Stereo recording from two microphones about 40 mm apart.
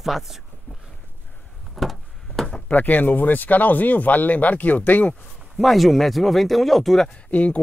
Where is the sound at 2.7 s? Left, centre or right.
Left.